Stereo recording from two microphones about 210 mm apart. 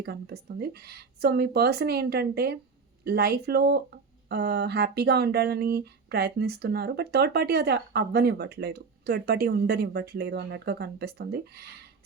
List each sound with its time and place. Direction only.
0.0 s speech: 50° right (ahead or behind)